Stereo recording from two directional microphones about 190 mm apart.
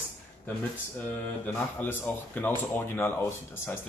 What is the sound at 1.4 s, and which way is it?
Speech, 10° left (ahead or behind).